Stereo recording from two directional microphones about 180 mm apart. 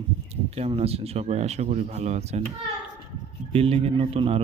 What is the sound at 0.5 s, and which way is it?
Speech, 35° right (ahead or behind).